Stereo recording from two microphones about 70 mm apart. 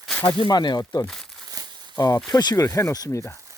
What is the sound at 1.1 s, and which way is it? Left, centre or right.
Crumpling, centre.